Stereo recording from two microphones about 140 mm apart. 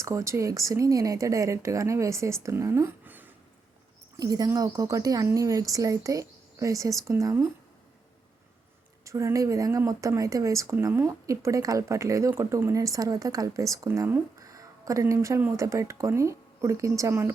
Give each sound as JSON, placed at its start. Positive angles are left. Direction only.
{"t": 0.0, "sound": "speech", "side_deg": -20}
{"t": 4.2, "sound": "speech", "side_deg": -30}
{"t": 9.0, "sound": "speech", "side_deg": -20}